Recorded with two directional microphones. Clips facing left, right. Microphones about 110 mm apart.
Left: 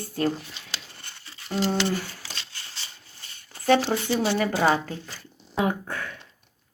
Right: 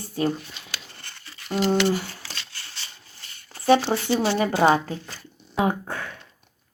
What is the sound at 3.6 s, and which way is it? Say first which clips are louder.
Speech: right 2 dB; 15° right (ahead or behind).